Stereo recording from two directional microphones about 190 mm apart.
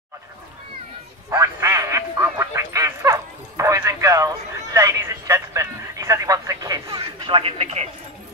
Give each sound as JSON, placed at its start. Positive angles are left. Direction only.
{"t": 1.3, "sound": "quack", "side_deg": -15}